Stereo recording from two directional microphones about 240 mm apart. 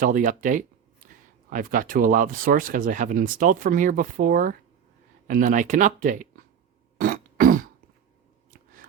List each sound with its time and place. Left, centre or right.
0.0 s speech: right
7.0 s throat clearing: right
8.4 s chewing: right